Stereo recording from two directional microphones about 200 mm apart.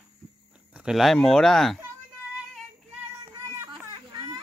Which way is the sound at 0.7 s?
5° right (ahead or behind).